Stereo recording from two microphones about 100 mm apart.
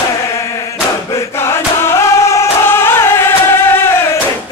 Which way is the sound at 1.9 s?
30° left (ahead or behind).